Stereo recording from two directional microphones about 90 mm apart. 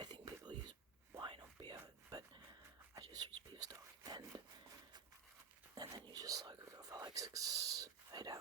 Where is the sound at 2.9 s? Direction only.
45° right (ahead or behind).